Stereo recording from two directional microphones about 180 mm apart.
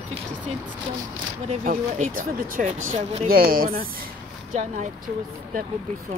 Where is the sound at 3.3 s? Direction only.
55° right (ahead or behind).